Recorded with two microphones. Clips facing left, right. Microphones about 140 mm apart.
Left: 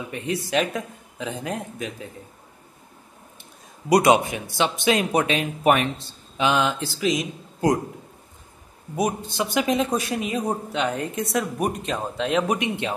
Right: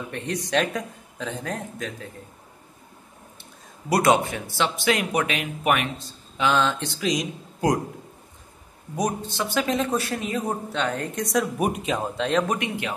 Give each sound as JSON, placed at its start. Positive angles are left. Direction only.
{"t": 0.0, "sound": "a man's voice", "side_deg": 5}
{"t": 3.9, "sound": "speech", "side_deg": 15}
{"t": 6.4, "sound": "speech", "side_deg": 10}
{"t": 8.9, "sound": "a man's voice", "side_deg": 10}
{"t": 12.5, "sound": "speech", "side_deg": 25}